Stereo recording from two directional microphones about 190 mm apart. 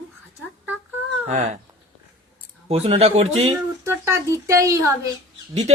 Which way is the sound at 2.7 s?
30° right (ahead or behind).